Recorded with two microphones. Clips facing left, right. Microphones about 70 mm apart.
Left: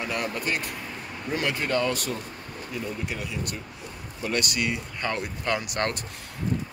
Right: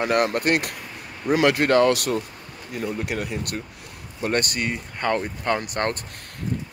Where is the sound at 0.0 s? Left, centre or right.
Right.